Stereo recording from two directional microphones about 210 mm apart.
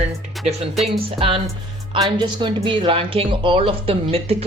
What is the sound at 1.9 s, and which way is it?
Speech, 20° right (ahead or behind).